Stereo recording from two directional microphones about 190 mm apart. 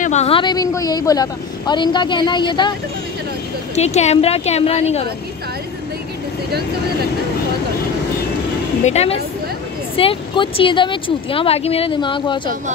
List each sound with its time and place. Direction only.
0.0 s speech: 35° left (ahead or behind)
3.7 s a woman's voice: 35° left (ahead or behind)
8.8 s a woman's voice: 35° left (ahead or behind)